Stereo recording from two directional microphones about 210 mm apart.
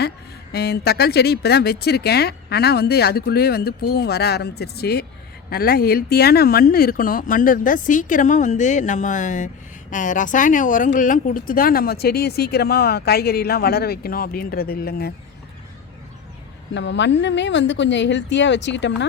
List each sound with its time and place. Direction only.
0.5 s speech: 50° left (ahead or behind)
16.7 s speech: 60° left (ahead or behind)